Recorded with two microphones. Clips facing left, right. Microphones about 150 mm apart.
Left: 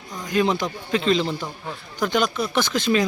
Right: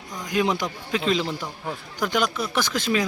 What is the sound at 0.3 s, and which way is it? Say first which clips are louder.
A man's voice: left 2 dB; 10° right (ahead or behind).